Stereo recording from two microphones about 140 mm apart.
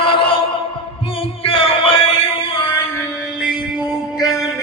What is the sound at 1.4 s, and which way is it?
Chant, 40° left (ahead or behind).